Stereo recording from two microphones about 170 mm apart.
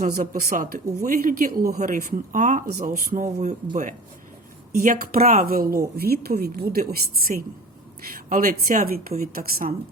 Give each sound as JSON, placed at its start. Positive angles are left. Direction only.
{"t": 0.0, "sound": "a woman's voice", "side_deg": -55}
{"t": 2.6, "sound": "a woman's voice", "side_deg": -65}
{"t": 4.8, "sound": "a woman's voice", "side_deg": -50}